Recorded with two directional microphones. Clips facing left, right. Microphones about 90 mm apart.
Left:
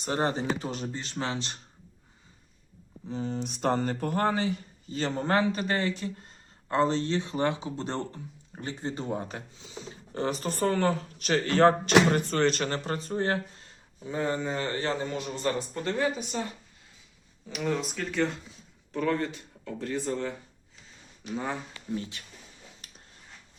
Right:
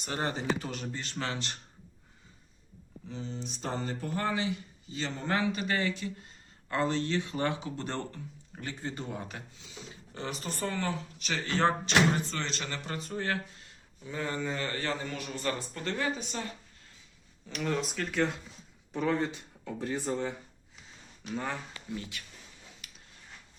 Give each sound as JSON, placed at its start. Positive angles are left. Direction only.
{"t": 0.0, "sound": "speech", "side_deg": 35}
{"t": 3.1, "sound": "speech", "side_deg": 50}
{"t": 10.2, "sound": "speech", "side_deg": 40}
{"t": 17.5, "sound": "speech", "side_deg": 5}
{"t": 18.9, "sound": "speech", "side_deg": -20}
{"t": 21.2, "sound": "speech", "side_deg": 15}
{"t": 21.9, "sound": "speech", "side_deg": 30}
{"t": 22.8, "sound": "a sound", "side_deg": 35}